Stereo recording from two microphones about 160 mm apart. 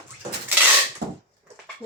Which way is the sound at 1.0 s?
90° right.